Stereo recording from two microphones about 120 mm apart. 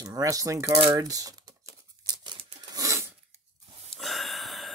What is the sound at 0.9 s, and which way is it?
Crumpling, 30° right (ahead or behind).